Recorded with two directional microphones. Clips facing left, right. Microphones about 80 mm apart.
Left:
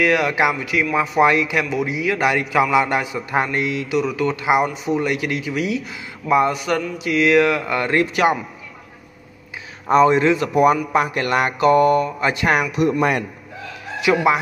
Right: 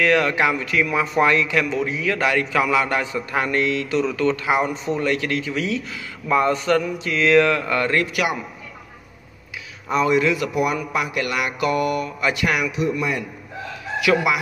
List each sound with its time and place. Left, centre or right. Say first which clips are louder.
0.0 s a man's voice: left 1 dB; centre
1.2 s a man's voice: left 2 dB; centre
9.8 s speech: left 5 dB; left
12.8 s a man's voice: left 5 dB; left
14.0 s chicken: left 3 dB; left